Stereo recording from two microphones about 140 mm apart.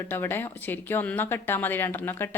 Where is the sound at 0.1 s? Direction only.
15° left (ahead or behind).